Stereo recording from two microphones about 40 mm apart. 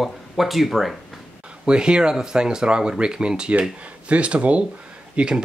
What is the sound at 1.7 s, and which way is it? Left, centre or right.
Speech, right.